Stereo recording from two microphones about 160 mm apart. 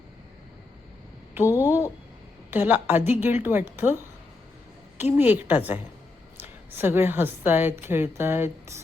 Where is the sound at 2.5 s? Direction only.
10° right (ahead or behind).